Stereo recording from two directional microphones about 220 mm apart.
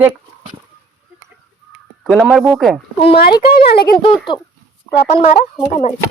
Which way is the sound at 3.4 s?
45° left (ahead or behind).